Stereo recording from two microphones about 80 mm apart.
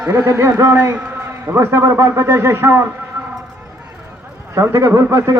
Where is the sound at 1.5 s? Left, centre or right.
Right.